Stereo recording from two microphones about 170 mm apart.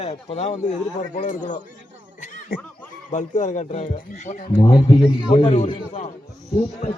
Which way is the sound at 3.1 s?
45° left (ahead or behind).